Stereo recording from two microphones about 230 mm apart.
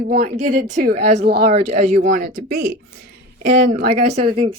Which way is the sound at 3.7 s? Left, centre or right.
Right.